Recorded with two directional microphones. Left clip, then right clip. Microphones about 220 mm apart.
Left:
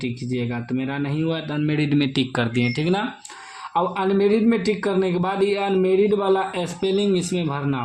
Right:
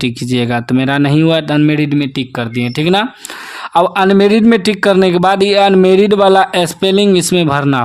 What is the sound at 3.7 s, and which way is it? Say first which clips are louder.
A man's voice: right 11 dB; 45° right (ahead or behind).